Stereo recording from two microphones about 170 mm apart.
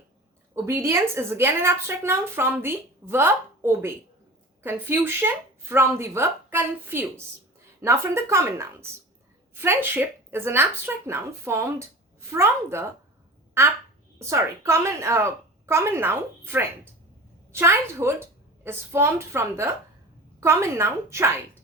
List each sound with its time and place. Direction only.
0.5 s a woman's voice: 15° right (ahead or behind)
17.5 s a woman's voice: 15° right (ahead or behind)